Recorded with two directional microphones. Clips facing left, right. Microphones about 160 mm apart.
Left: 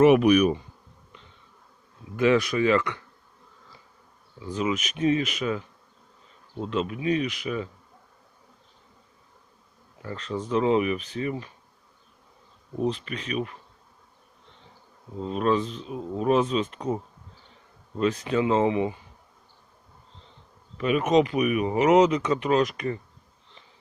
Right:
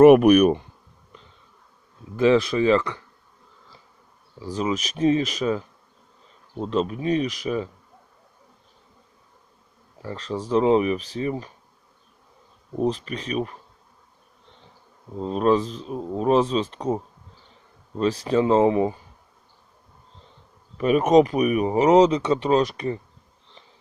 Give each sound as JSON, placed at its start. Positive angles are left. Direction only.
{"t": 0.0, "sound": "speech", "side_deg": -50}
{"t": 2.1, "sound": "speech", "side_deg": -30}
{"t": 4.4, "sound": "speech", "side_deg": -35}
{"t": 10.0, "sound": "speech", "side_deg": -35}
{"t": 12.7, "sound": "speech", "side_deg": -40}
{"t": 15.2, "sound": "speech", "side_deg": -35}
{"t": 20.7, "sound": "speech", "side_deg": -40}